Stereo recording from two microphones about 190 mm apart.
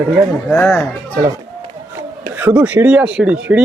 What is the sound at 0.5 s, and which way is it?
Speech, 5° left (ahead or behind).